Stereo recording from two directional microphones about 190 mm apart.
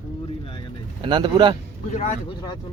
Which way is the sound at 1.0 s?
25° right (ahead or behind).